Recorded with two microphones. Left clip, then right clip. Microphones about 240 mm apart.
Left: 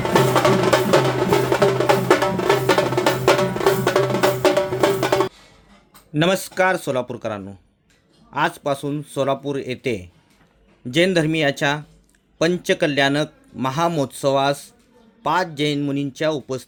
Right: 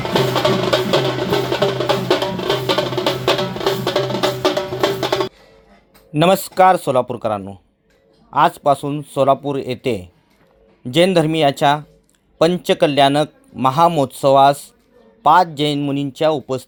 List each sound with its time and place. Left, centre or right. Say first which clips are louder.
0.1 s music: even; centre
3.9 s music: even; left
6.1 s a man's voice: right 6 dB; centre